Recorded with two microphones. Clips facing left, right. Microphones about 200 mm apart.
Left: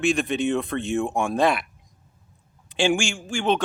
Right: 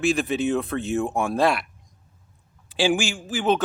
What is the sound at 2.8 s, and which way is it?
Speech, 5° right (ahead or behind).